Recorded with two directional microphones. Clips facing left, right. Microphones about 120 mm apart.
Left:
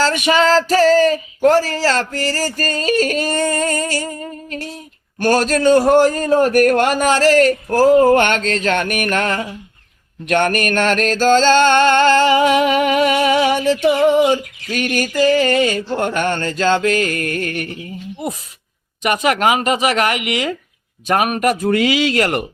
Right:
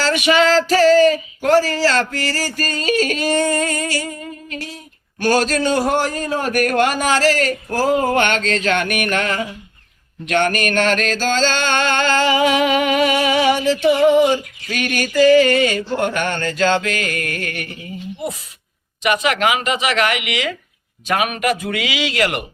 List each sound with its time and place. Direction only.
0.0 s female singing: 40° left (ahead or behind)
15.4 s speech: 35° left (ahead or behind)
19.0 s speech: 45° left (ahead or behind)